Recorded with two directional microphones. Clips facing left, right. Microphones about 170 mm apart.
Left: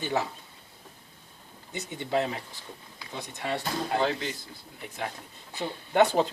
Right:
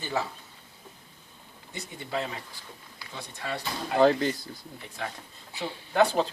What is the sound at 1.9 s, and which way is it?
Speech, 20° left (ahead or behind).